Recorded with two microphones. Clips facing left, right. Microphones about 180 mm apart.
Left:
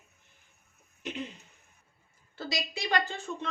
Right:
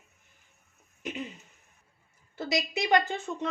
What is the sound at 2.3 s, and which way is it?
A woman's voice, 20° right (ahead or behind).